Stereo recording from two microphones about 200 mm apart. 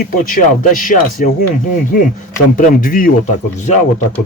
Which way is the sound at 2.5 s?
45° left (ahead or behind).